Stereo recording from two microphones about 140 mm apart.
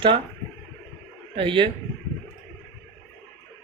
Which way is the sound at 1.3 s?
35° right (ahead or behind).